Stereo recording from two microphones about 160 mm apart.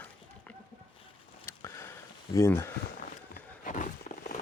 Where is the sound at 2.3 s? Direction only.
15° left (ahead or behind).